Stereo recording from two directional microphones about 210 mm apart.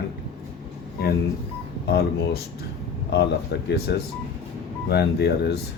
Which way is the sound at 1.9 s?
50° left (ahead or behind).